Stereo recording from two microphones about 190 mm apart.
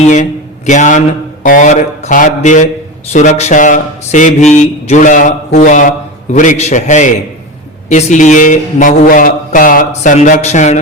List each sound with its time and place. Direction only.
0.0 s a man's voice: 40° left (ahead or behind)